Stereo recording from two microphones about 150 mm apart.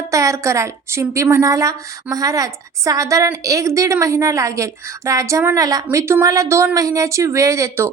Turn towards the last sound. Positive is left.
turn(degrees=-20)  # may be behind; listen again after turning